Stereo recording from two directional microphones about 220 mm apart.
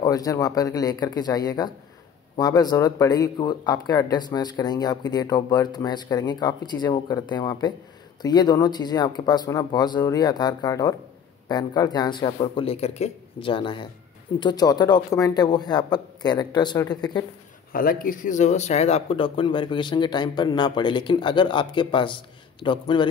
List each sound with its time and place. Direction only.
0.0 s speech: 15° left (ahead or behind)
17.7 s speech: 40° left (ahead or behind); by 23.0 s 20° left (ahead or behind)